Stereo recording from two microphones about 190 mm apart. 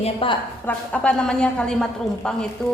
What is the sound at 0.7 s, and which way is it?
A woman's voice, 5° left (ahead or behind).